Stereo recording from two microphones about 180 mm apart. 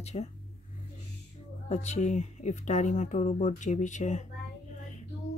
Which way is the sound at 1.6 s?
40° left (ahead or behind).